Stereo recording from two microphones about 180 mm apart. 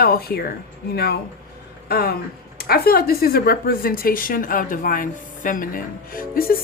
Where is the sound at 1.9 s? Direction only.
60° left (ahead or behind).